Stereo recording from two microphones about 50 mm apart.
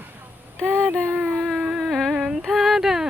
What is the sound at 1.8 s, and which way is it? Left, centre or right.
Humming, centre.